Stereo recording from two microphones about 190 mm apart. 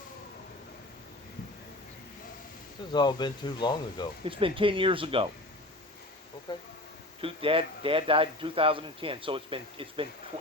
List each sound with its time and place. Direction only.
2.9 s speech: 20° left (ahead or behind)
4.3 s speech: 30° right (ahead or behind)
6.5 s speech: 25° left (ahead or behind)
7.2 s speech: 30° right (ahead or behind)